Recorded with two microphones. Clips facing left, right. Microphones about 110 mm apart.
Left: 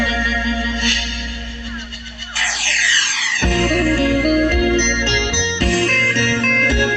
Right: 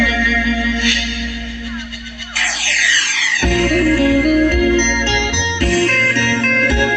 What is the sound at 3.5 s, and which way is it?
Music, 35° left (ahead or behind).